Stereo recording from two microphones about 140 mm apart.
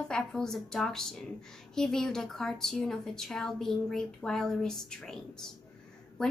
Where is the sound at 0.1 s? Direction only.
5° left (ahead or behind).